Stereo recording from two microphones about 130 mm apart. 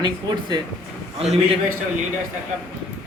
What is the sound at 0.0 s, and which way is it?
Speech, 35° right (ahead or behind).